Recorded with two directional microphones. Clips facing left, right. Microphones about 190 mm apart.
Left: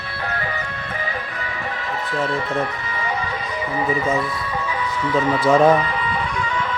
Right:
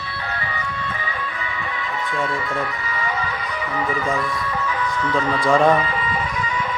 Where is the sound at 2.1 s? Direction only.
35° left (ahead or behind).